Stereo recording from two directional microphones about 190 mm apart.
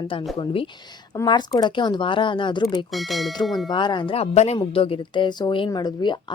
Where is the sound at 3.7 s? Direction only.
25° left (ahead or behind).